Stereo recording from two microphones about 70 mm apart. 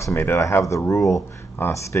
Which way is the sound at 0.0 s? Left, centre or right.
Left.